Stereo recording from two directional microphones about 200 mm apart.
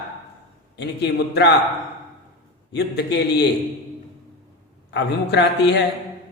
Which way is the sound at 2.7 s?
55° left (ahead or behind).